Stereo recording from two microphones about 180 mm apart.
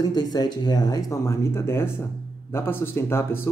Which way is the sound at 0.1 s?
20° left (ahead or behind).